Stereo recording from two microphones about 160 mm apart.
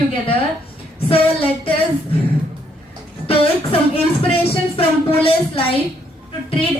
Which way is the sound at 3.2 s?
35° left (ahead or behind).